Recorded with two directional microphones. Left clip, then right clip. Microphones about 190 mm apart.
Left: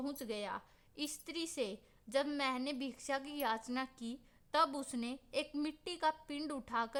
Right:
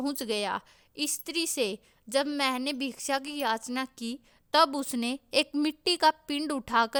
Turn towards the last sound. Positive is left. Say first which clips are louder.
# right 12 dB
turn(degrees=-45)  # may be behind; listen again after turning